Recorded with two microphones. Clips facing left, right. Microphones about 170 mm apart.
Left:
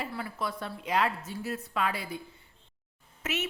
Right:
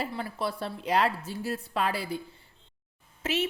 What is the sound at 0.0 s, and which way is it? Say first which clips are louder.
A woman's voice: right 3 dB; 30° right (ahead or behind).